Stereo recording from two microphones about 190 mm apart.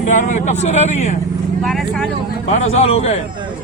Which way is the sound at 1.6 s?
Centre (ahead or behind).